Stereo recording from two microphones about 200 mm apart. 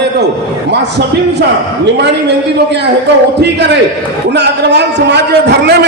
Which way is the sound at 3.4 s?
60° right (ahead or behind).